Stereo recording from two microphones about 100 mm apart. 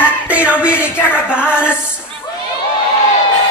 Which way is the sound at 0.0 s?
15° right (ahead or behind).